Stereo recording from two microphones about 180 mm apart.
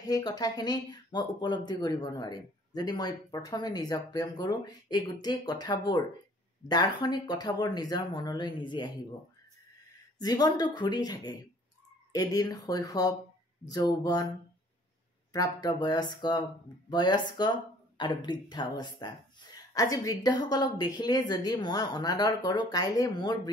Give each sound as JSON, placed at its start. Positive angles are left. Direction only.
{"t": 0.0, "sound": "speech", "side_deg": 20}
{"t": 10.1, "sound": "speech", "side_deg": 20}
{"t": 15.3, "sound": "speech", "side_deg": 20}